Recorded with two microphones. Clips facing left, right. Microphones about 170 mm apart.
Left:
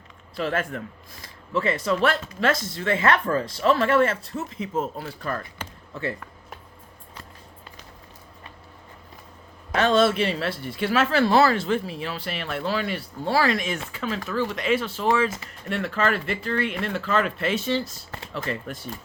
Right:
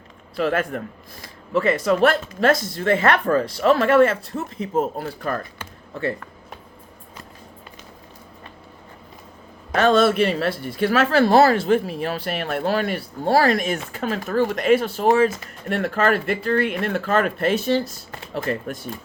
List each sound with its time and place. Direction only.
0.3 s speech: 50° right (ahead or behind)
9.7 s speech: 40° right (ahead or behind)